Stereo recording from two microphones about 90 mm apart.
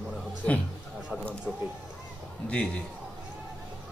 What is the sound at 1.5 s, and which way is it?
A man's voice, 5° left (ahead or behind).